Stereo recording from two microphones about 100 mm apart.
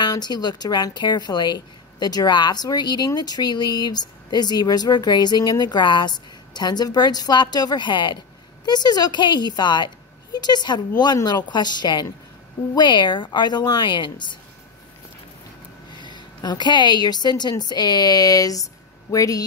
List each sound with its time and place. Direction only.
0.0 s speech: 45° left (ahead or behind)
15.9 s speech: 50° left (ahead or behind)